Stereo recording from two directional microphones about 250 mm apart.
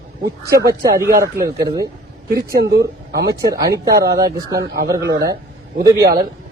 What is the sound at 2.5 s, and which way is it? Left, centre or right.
Speech, right.